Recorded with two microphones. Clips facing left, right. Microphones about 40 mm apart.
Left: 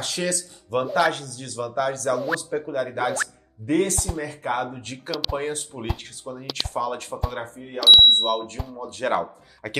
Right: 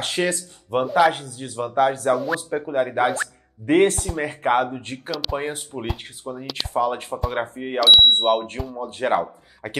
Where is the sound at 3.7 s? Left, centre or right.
Right.